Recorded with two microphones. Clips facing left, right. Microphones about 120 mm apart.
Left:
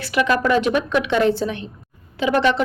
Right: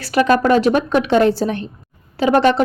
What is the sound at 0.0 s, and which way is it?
A woman's voice, 40° right (ahead or behind).